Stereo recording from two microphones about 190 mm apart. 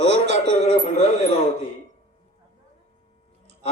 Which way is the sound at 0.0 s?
65° right (ahead or behind).